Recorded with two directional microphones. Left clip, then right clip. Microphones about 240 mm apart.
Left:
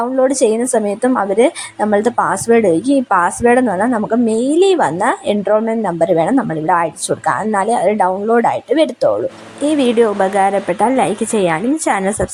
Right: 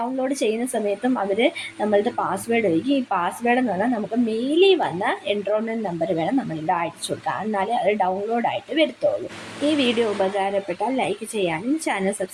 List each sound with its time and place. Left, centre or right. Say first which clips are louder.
0.2 s a woman's voice: left 12 dB; left